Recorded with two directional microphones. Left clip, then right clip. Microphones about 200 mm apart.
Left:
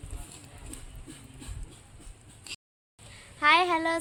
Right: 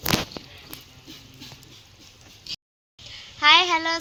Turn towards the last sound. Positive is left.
turn(degrees=15)  # may be behind; listen again after turning